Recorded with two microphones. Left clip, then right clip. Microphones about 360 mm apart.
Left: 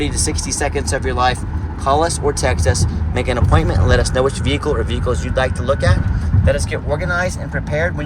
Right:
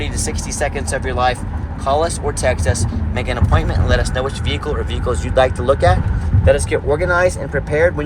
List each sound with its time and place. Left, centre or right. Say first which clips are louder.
0.0 s speech: left 3 dB; centre